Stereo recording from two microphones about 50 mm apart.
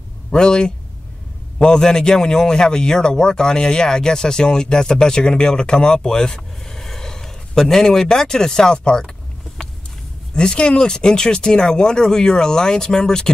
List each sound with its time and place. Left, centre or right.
0.3 s speech: centre
10.3 s speech: centre